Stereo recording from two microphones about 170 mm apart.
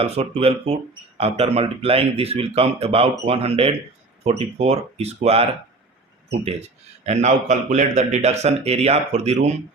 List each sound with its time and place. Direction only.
0.0 s speech: 35° right (ahead or behind)